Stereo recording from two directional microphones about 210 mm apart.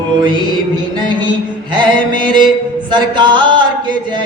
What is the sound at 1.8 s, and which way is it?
Speech, 20° right (ahead or behind).